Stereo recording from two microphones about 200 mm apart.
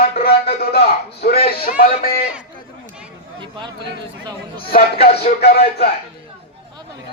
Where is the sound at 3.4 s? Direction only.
25° right (ahead or behind).